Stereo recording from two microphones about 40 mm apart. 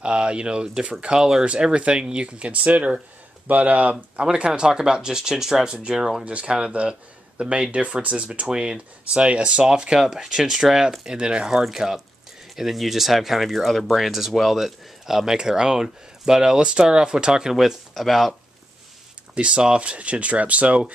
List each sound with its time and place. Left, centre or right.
0.0 s speech: right
4.2 s speech: right
6.2 s speech: right
9.5 s speech: centre
11.6 s speech: centre
17.9 s speech: centre
19.3 s speech: right